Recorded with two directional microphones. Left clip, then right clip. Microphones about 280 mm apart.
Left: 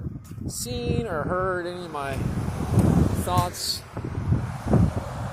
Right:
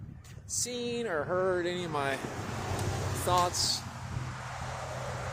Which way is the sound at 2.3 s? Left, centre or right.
Left.